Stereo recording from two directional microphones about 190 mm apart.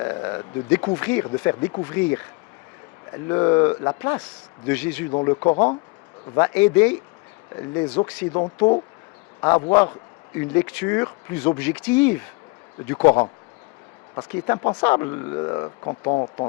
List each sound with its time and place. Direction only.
0.0 s speech: 20° left (ahead or behind)
3.2 s speech: 20° left (ahead or behind)
4.6 s speech: 10° left (ahead or behind)
5.2 s speech: 25° left (ahead or behind)
6.3 s speech: 10° left (ahead or behind)
8.0 s speech: 20° left (ahead or behind)
10.3 s speech: 10° left (ahead or behind); by 16.5 s 30° left (ahead or behind)